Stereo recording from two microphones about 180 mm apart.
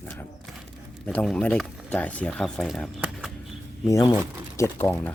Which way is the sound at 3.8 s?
20° left (ahead or behind).